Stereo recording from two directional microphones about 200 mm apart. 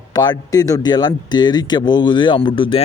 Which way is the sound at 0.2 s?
20° left (ahead or behind).